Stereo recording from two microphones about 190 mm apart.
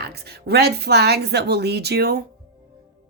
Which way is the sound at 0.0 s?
60° right (ahead or behind).